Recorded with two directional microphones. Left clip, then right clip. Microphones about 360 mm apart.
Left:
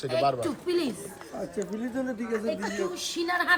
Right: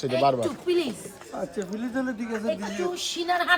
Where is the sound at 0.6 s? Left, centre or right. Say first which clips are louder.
Right 2 dB; centre.